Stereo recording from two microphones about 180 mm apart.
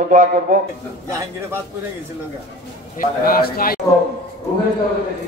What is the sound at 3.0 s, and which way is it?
Speech, 55° left (ahead or behind).